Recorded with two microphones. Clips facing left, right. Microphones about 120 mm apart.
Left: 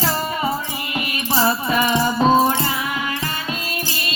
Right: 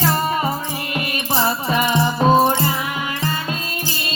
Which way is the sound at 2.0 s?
20° right (ahead or behind).